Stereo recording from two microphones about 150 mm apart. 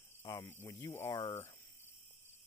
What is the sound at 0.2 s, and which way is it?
Speech, 20° left (ahead or behind).